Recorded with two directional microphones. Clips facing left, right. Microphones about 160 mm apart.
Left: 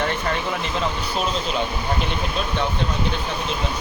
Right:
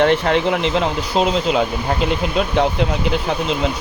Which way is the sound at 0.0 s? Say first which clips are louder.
Right 9 dB; 90° right.